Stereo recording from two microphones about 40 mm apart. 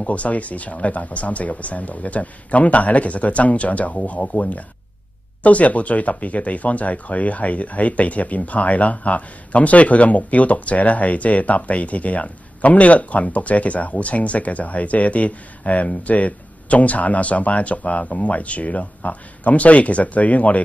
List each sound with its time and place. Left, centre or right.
0.0 s speech: left